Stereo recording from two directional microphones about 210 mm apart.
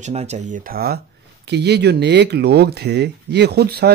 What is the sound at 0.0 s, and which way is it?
Speech, 30° right (ahead or behind).